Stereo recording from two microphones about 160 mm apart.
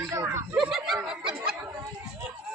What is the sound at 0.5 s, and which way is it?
Snicker, 5° right (ahead or behind).